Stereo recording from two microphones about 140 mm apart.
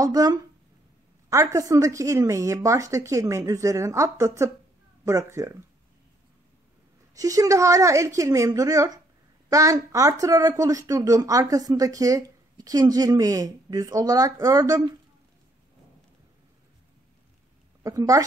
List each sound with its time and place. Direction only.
0.0 s speech: 25° right (ahead or behind)
7.2 s speech: 25° right (ahead or behind)
17.8 s speech: 25° right (ahead or behind)